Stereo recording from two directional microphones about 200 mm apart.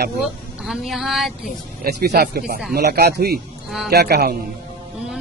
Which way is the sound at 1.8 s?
50° right (ahead or behind).